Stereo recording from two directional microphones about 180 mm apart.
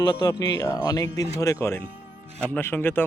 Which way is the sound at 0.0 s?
20° left (ahead or behind).